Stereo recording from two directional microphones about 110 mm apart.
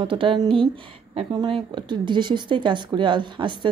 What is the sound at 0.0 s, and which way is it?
Speech, 50° right (ahead or behind).